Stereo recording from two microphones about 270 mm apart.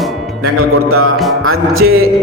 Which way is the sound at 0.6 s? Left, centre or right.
Right.